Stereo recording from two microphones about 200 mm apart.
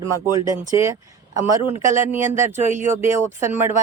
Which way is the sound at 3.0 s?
10° right (ahead or behind).